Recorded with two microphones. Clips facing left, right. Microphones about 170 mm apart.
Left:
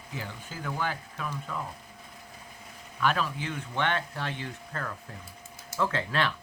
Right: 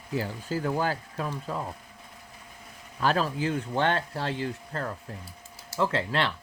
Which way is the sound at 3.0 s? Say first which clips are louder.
Right 3 dB; 35° right (ahead or behind).